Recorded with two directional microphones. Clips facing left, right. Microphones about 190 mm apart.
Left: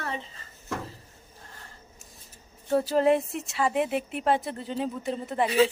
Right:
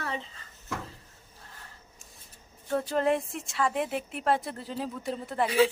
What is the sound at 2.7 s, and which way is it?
A woman's voice, 5° left (ahead or behind).